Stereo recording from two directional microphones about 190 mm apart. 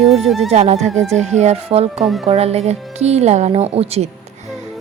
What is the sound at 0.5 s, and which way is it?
Speech, 35° right (ahead or behind).